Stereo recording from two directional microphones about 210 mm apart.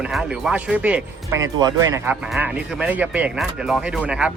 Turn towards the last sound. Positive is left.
turn(degrees=-5)  # may be behind; listen again after turning